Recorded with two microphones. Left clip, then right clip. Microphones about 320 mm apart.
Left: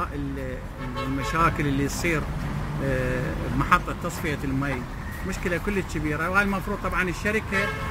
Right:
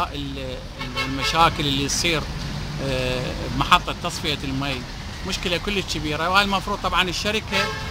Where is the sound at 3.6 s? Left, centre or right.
Centre.